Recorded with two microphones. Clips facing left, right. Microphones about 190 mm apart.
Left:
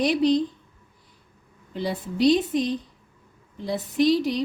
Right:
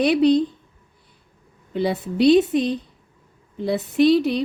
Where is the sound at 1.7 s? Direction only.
65° right (ahead or behind).